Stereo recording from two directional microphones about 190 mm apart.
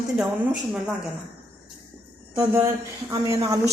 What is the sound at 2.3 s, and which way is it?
A woman's voice, 15° right (ahead or behind).